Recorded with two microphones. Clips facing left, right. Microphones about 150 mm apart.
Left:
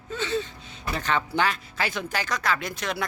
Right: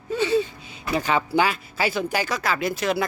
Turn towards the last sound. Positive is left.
turn(degrees=-5)  # may be behind; listen again after turning